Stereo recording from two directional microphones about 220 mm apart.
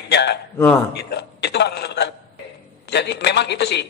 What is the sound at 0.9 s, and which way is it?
A man's voice, 50° left (ahead or behind).